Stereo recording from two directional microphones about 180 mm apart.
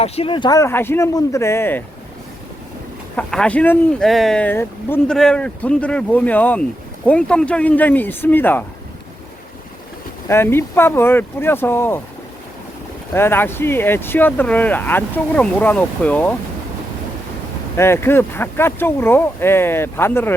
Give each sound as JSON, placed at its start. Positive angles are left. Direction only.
{"t": 0.0, "sound": "speech", "side_deg": 30}
{"t": 3.2, "sound": "speech", "side_deg": 5}
{"t": 10.2, "sound": "speech", "side_deg": 15}
{"t": 13.1, "sound": "speech", "side_deg": 10}
{"t": 17.7, "sound": "speech", "side_deg": 15}